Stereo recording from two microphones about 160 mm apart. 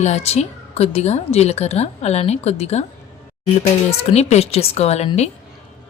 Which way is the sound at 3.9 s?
45° left (ahead or behind).